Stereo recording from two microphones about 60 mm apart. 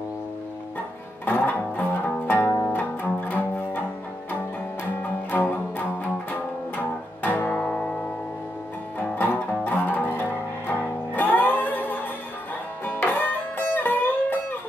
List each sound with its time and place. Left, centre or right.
1.2 s music: left
5.3 s music: left
7.5 s music: centre
8.9 s music: left